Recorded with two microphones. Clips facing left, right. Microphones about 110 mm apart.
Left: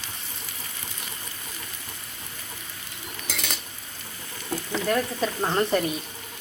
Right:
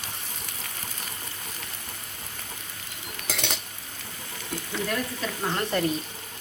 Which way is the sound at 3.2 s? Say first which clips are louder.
Right 2 dB; 65° right (ahead or behind).